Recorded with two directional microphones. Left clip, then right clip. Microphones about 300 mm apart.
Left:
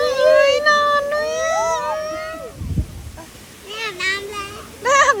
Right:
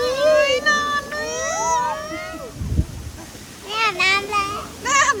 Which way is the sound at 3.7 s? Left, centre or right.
Right.